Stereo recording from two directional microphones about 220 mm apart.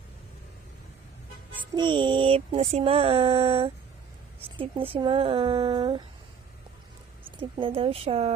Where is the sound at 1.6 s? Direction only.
20° right (ahead or behind).